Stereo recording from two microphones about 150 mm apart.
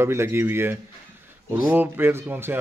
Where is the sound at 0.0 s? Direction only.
15° right (ahead or behind).